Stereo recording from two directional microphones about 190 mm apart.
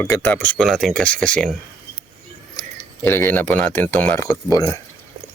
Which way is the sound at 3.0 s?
10° left (ahead or behind).